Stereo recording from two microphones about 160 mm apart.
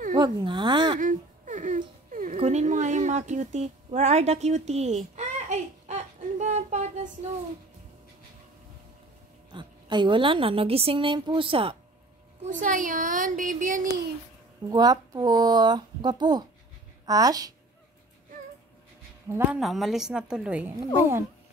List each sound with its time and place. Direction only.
0.1 s speech: 30° right (ahead or behind)
0.9 s baby cry: 50° right (ahead or behind)
2.0 s dog: 50° right (ahead or behind)
2.3 s a sound: 45° right (ahead or behind)
9.5 s a woman's voice: 30° right (ahead or behind)
12.4 s speech: 55° right (ahead or behind)
14.7 s speech: 25° right (ahead or behind)
19.2 s a woman's voice: 15° right (ahead or behind)
19.6 s a woman's voice: centre (ahead or behind)